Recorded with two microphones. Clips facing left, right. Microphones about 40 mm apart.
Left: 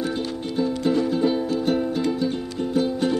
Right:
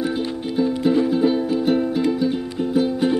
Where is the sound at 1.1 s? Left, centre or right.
Centre.